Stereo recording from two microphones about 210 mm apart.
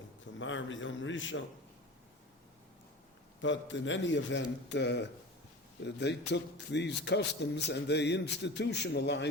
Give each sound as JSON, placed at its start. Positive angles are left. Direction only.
{"t": 0.3, "sound": "a man's voice", "side_deg": 65}
{"t": 3.4, "sound": "a man's voice", "side_deg": 60}